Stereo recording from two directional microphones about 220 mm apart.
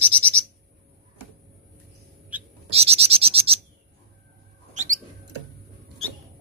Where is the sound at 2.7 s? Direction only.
25° right (ahead or behind).